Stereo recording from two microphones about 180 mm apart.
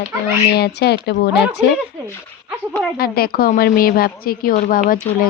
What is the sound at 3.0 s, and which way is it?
A woman's voice, 55° left (ahead or behind).